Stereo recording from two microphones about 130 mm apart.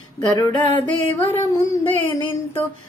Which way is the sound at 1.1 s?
20° left (ahead or behind).